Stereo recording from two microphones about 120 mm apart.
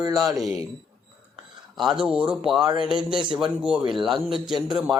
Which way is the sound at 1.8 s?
5° right (ahead or behind).